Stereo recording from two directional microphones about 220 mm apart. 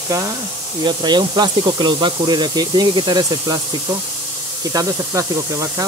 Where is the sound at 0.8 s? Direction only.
20° right (ahead or behind).